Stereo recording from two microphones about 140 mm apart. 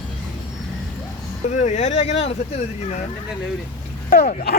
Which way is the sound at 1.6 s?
55° left (ahead or behind).